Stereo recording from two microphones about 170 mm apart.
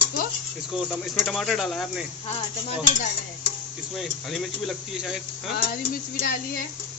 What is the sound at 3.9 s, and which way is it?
Speech, centre (ahead or behind).